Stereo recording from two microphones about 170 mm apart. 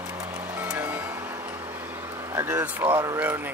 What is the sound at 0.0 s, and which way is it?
Music, 15° right (ahead or behind).